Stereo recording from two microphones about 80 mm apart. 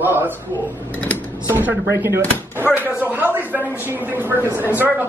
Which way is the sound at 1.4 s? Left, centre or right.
Right.